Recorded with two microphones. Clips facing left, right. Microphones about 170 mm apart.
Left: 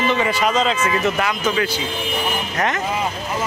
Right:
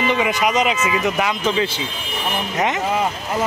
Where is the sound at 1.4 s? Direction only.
25° right (ahead or behind).